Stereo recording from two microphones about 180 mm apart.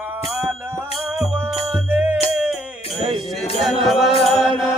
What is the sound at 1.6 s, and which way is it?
Music, 15° right (ahead or behind).